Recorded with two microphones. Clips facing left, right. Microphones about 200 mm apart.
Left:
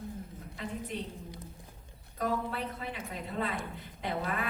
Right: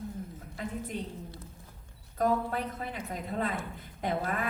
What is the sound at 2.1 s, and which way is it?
A woman's voice, 45° right (ahead or behind).